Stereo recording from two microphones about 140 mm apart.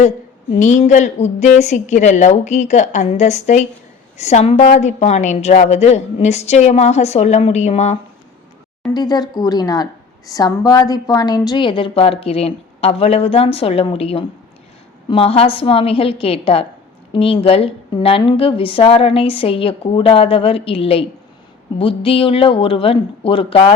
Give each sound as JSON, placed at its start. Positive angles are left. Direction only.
{"t": 0.6, "sound": "a woman's voice", "side_deg": 60}
{"t": 8.9, "sound": "a woman's voice", "side_deg": 30}